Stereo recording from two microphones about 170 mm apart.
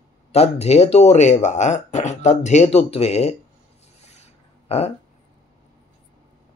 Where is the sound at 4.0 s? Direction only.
40° left (ahead or behind).